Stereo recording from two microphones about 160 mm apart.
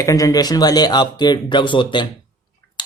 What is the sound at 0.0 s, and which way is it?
Speech, 20° left (ahead or behind).